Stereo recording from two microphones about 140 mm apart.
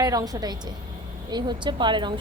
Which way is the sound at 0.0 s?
25° right (ahead or behind).